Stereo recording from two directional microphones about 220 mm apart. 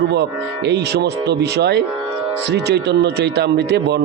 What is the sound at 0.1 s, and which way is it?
A man's voice, 50° right (ahead or behind).